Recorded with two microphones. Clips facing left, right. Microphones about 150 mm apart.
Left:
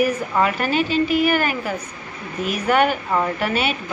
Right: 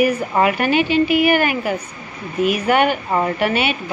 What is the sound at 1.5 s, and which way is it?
Speech, 10° right (ahead or behind).